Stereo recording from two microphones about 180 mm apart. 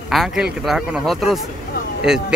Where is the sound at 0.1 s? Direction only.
Centre (ahead or behind).